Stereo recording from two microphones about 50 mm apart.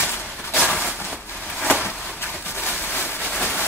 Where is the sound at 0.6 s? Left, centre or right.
Left.